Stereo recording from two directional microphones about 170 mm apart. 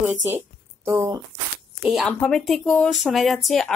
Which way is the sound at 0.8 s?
20° right (ahead or behind).